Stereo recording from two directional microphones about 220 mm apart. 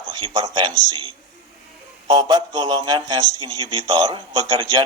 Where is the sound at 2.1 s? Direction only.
15° right (ahead or behind).